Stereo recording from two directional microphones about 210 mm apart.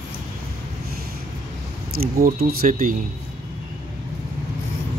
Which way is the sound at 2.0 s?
45° right (ahead or behind).